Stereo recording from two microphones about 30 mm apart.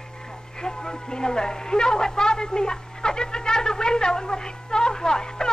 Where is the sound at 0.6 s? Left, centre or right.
Left.